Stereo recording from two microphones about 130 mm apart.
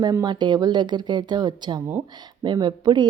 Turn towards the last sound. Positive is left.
turn(degrees=-35)  # may be behind; listen again after turning